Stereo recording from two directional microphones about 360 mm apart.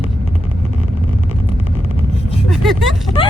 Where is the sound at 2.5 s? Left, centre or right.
Centre.